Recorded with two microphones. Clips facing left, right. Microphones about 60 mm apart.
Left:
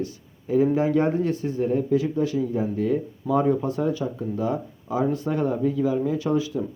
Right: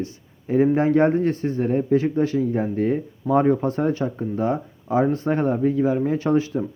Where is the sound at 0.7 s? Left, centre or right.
Right.